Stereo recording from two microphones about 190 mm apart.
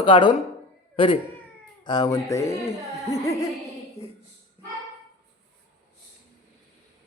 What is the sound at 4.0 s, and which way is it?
Speech, 35° left (ahead or behind).